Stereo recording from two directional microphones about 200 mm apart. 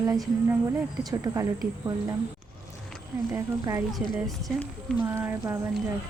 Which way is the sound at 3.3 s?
15° right (ahead or behind).